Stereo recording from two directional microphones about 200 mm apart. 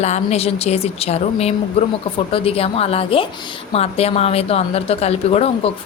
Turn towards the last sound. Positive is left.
turn(degrees=30)  # may be behind; listen again after turning